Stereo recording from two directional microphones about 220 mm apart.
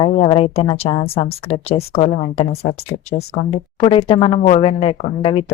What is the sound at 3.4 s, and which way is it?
Speech, 30° left (ahead or behind).